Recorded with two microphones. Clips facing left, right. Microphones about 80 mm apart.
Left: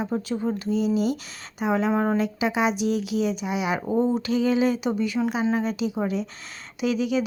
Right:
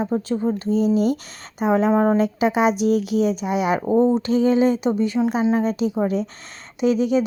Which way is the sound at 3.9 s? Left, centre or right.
Right.